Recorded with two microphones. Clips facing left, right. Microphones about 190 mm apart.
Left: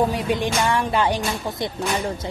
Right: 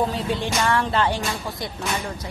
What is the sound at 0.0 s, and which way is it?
Speech, 15° left (ahead or behind).